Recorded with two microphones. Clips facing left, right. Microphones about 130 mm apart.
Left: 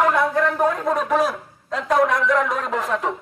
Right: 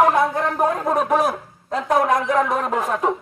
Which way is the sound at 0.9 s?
55° right (ahead or behind).